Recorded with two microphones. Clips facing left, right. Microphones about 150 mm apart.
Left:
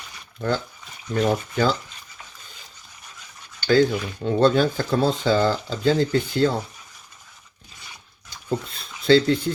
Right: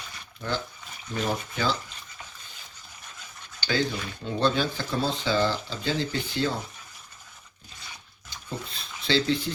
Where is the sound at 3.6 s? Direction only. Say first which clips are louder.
Left 9 dB; 50° left (ahead or behind).